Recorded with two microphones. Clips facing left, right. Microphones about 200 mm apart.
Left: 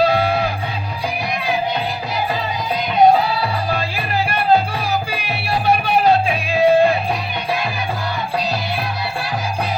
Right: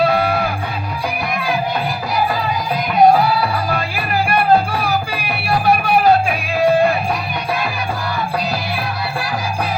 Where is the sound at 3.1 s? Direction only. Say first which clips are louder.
Right 2 dB; 25° left (ahead or behind).